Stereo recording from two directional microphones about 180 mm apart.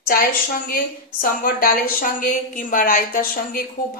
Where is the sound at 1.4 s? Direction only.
55° left (ahead or behind).